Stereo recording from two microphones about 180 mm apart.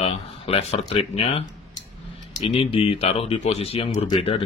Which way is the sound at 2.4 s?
30° left (ahead or behind).